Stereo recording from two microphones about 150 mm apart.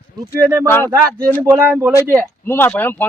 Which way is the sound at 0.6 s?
15° left (ahead or behind).